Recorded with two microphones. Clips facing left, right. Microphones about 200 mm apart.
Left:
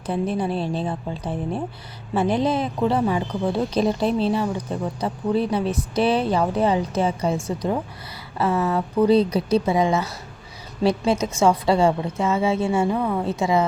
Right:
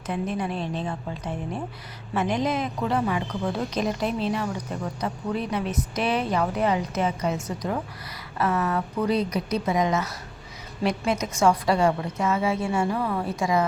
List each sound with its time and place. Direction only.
0.1 s a woman's voice: 35° left (ahead or behind)